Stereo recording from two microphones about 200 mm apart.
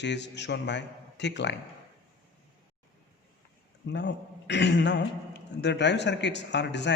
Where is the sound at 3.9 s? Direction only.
60° left (ahead or behind).